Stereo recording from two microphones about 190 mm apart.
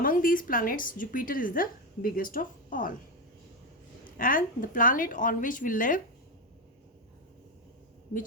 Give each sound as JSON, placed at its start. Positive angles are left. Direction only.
{"t": 0.0, "sound": "a woman's voice", "side_deg": 45}
{"t": 4.2, "sound": "a woman's voice", "side_deg": 45}